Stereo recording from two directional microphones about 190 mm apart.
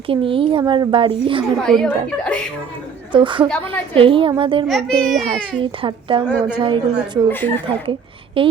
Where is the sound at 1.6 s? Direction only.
5° left (ahead or behind).